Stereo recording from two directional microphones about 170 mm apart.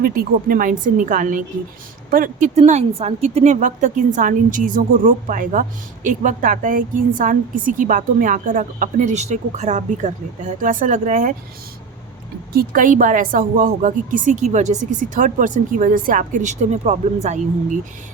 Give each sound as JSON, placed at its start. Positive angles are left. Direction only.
{"t": 0.0, "sound": "a woman's voice", "side_deg": -55}
{"t": 2.6, "sound": "a woman's voice", "side_deg": -40}
{"t": 12.5, "sound": "a woman's voice", "side_deg": -55}